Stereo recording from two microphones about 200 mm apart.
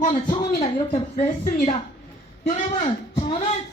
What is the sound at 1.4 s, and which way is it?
Speech, 40° left (ahead or behind).